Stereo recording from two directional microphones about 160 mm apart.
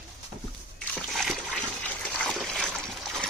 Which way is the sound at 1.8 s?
5° left (ahead or behind).